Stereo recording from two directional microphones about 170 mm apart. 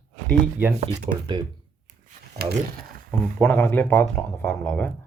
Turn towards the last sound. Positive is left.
turn(degrees=10)  # may be behind; listen again after turning